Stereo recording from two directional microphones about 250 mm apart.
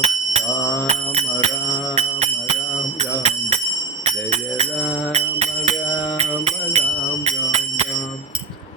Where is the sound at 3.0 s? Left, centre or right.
Right.